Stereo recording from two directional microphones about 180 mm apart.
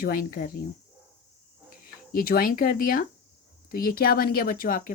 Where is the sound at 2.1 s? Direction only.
55° left (ahead or behind).